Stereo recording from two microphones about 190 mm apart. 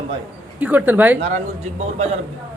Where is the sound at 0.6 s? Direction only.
10° right (ahead or behind).